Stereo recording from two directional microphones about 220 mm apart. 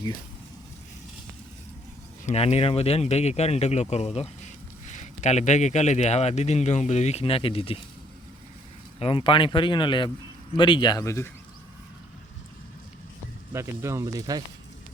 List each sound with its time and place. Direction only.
2.2 s speech: 30° left (ahead or behind)
9.0 s speech: 25° left (ahead or behind)
13.5 s speech: 10° right (ahead or behind)